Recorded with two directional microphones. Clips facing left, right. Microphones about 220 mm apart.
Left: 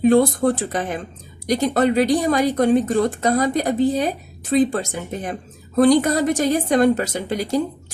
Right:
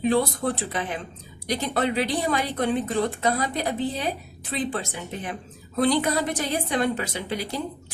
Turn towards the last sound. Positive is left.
turn(degrees=45)  # may be behind; listen again after turning